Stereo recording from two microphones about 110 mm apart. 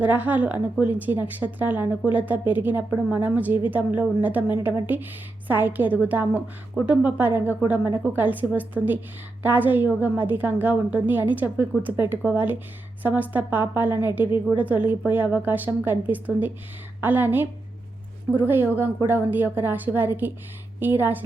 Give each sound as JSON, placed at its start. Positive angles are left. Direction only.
{"t": 0.0, "sound": "a woman's voice", "side_deg": -15}